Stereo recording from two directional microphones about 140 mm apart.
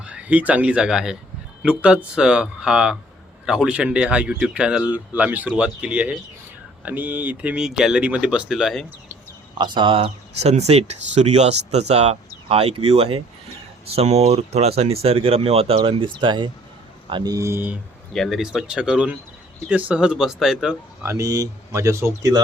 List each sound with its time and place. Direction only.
0.0 s speech: 10° right (ahead or behind)
9.6 s speech: 35° right (ahead or behind); by 17.7 s 15° right (ahead or behind)
18.1 s speech: centre (ahead or behind)
21.0 s speech: 20° right (ahead or behind)